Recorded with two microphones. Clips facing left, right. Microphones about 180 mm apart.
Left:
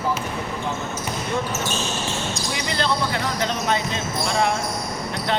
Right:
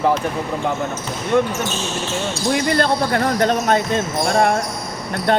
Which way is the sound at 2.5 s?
50° right (ahead or behind).